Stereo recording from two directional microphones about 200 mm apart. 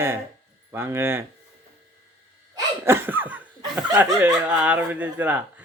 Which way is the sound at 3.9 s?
15° right (ahead or behind).